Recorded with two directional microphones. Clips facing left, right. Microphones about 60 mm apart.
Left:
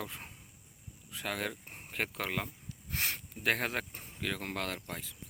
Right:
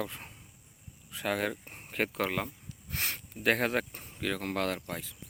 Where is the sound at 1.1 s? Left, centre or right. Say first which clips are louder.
Right 5 dB; centre.